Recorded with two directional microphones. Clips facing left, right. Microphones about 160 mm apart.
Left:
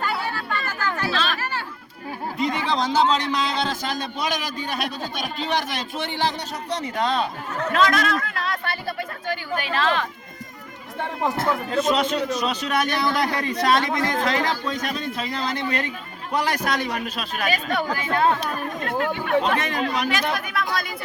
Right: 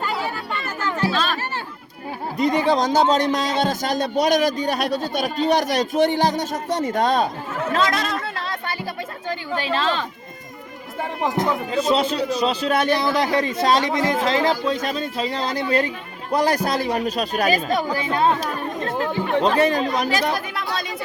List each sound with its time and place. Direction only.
0.3 s music: 25° right (ahead or behind)
1.1 s chatter: 40° right (ahead or behind)
2.4 s a man's voice: 40° right (ahead or behind)
7.7 s speech: 25° right (ahead or behind)
11.8 s speech: 30° right (ahead or behind)